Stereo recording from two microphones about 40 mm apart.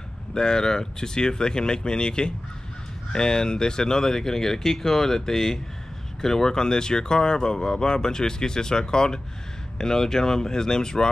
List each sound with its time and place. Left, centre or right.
0.3 s speech: centre